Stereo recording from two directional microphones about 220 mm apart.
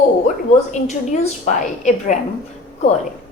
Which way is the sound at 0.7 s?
35° left (ahead or behind).